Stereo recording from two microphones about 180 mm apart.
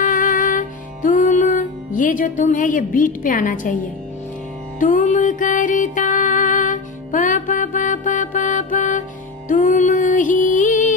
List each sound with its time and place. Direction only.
0.0 s music: 50° left (ahead or behind)
4.7 s music: 45° left (ahead or behind)